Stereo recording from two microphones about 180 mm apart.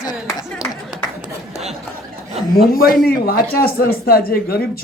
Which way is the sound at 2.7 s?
55° left (ahead or behind).